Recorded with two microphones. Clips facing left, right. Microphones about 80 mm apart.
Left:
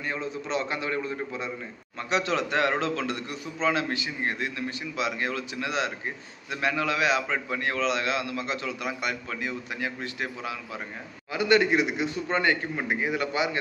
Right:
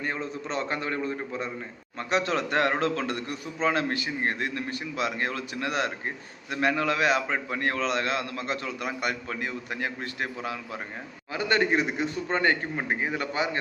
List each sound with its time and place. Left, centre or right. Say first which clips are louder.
0.0 s a man's voice: even; right